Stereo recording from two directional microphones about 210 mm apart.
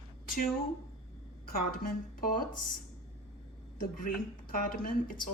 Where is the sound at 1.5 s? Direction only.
40° left (ahead or behind).